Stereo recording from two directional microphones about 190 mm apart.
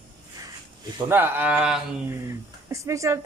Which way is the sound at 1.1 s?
10° right (ahead or behind).